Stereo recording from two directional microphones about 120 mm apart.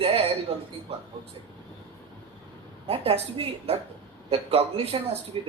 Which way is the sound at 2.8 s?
55° right (ahead or behind).